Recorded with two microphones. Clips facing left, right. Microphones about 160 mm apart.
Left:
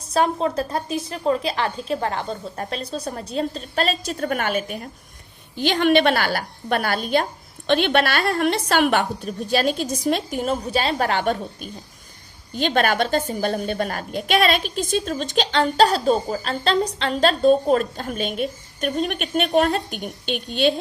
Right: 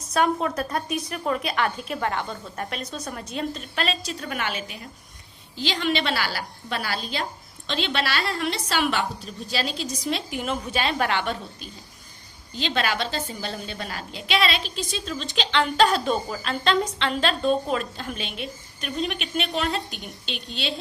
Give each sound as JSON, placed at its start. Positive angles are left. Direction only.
{"t": 0.1, "sound": "a woman's voice", "side_deg": 30}